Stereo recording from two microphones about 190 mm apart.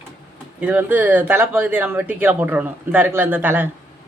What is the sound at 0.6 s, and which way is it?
A woman's voice, 10° right (ahead or behind).